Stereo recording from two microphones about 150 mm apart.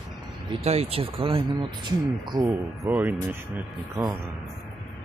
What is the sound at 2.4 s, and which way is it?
Speech, 15° right (ahead or behind).